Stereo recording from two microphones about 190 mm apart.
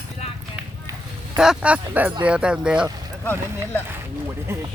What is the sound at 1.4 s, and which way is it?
Speech, 5° right (ahead or behind).